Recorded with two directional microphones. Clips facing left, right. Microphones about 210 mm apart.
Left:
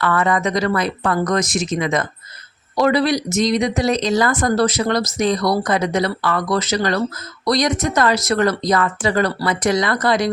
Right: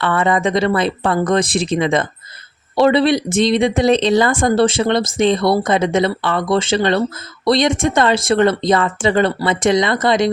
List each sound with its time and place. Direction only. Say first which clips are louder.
0.0 s speech: right 2 dB; 25° right (ahead or behind)